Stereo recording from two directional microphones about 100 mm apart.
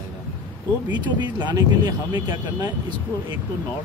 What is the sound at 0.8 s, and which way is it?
Speech, 45° right (ahead or behind).